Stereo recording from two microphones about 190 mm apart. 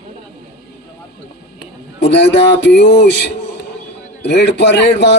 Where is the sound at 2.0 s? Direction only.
65° left (ahead or behind).